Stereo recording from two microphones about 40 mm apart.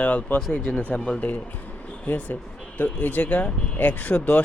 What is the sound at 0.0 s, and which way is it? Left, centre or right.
Speech, left.